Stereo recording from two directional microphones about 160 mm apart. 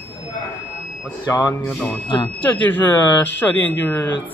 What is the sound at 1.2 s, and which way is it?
Speech, 15° left (ahead or behind).